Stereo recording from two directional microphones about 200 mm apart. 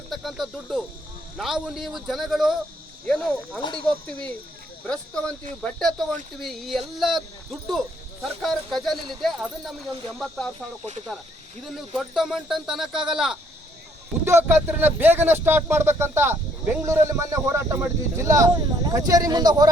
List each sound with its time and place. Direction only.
0.1 s speech: centre (ahead or behind); by 19.7 s 20° right (ahead or behind)